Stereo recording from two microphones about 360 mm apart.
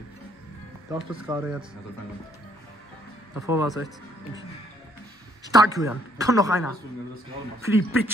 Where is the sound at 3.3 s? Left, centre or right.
Centre.